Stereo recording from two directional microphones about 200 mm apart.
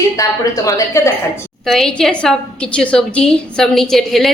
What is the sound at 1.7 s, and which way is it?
A woman's voice, centre (ahead or behind).